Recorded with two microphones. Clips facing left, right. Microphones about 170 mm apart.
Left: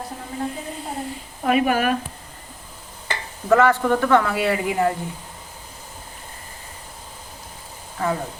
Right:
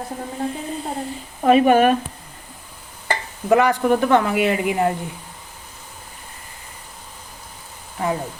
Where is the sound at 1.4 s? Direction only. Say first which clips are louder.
Right 6 dB; 25° right (ahead or behind).